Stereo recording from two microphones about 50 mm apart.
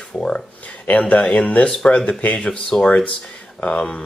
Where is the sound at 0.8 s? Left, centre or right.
Left.